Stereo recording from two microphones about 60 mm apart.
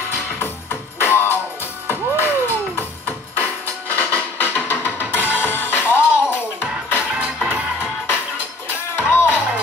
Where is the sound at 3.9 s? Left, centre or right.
Left.